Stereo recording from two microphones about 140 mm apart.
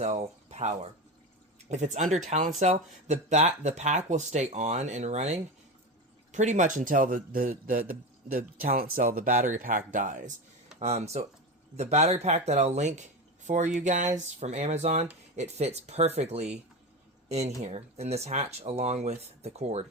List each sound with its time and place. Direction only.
0.0 s speech: 50° right (ahead or behind)
10.8 s speech: 50° right (ahead or behind)